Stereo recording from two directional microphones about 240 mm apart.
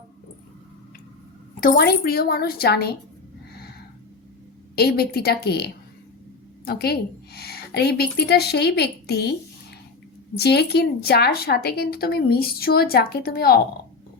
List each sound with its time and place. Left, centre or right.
1.6 s speech: left
4.7 s speech: left
10.3 s speech: left